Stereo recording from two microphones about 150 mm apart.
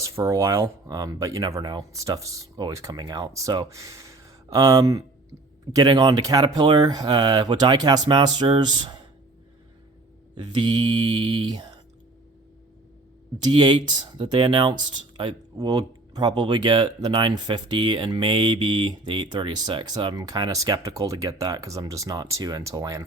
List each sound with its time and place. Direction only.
0.0 s speech: 20° right (ahead or behind)
10.3 s speech: 30° right (ahead or behind)
13.4 s speech: 30° right (ahead or behind)